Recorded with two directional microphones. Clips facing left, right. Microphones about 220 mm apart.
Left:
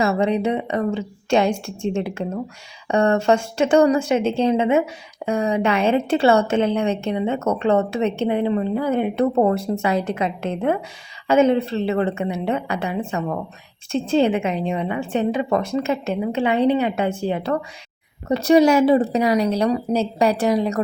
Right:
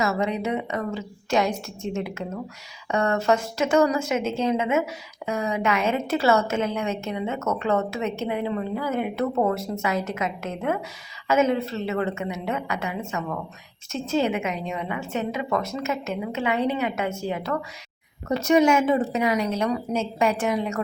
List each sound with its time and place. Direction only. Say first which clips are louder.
0.0 s a woman's voice: left 6 dB; 30° left (ahead or behind)